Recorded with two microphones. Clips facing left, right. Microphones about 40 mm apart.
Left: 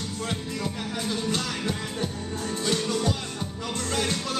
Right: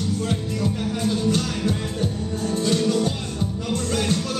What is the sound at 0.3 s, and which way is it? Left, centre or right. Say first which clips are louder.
Music: right 6 dB; left.